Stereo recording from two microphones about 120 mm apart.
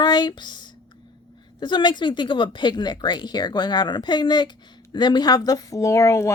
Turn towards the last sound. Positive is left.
turn(degrees=25)  # may be behind; listen again after turning